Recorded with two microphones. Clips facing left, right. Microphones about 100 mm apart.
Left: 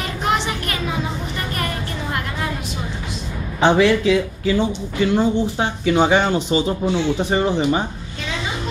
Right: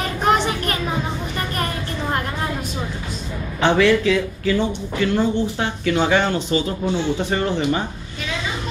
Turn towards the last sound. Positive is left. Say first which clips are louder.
# left 2 dB
turn(degrees=15)  # may be behind; listen again after turning